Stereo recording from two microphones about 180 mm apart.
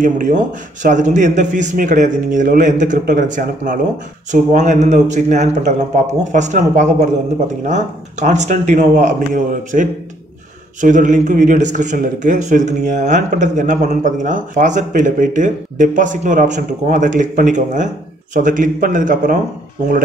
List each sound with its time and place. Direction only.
0.0 s a man's voice: 45° right (ahead or behind)